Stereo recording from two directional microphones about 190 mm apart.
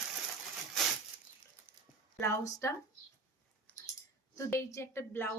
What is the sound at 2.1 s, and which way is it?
Speech, 15° left (ahead or behind).